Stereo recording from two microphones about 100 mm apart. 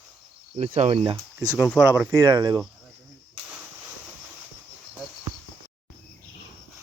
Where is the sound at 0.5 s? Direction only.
85° right.